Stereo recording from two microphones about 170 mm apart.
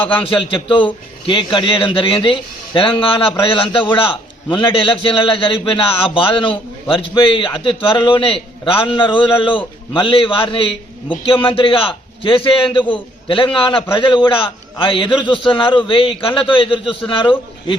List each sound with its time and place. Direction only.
0.2 s a man's voice: 30° left (ahead or behind)